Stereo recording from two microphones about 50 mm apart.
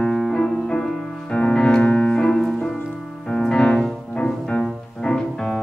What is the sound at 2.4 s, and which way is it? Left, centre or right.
Music, centre.